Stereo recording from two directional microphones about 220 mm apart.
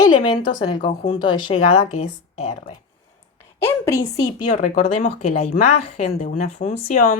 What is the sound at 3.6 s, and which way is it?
Speech, 10° left (ahead or behind).